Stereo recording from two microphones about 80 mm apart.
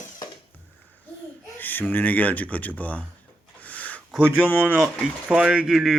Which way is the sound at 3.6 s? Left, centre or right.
Centre.